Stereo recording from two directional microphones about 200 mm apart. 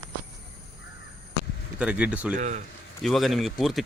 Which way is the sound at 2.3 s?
40° right (ahead or behind).